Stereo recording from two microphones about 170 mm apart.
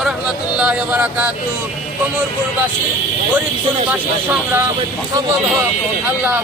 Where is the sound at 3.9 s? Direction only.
10° right (ahead or behind).